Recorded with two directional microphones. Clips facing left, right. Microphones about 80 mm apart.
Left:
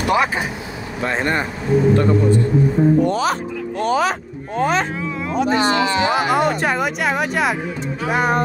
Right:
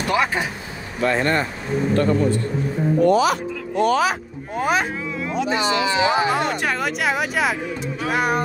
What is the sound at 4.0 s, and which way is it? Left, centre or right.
Speech, centre.